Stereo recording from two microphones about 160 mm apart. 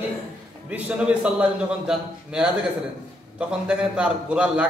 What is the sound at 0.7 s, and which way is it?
A man's voice, 10° right (ahead or behind).